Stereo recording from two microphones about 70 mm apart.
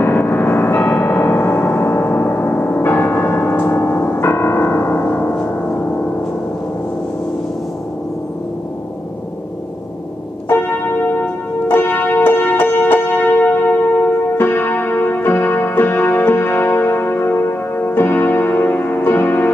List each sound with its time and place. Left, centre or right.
0.0 s music: left
11.6 s music: left